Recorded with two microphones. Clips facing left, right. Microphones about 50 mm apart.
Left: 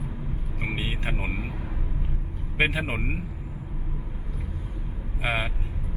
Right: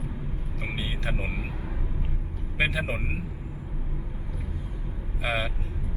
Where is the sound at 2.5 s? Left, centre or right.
Left.